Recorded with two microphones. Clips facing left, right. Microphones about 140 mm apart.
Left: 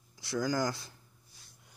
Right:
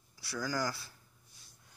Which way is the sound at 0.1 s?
20° left (ahead or behind).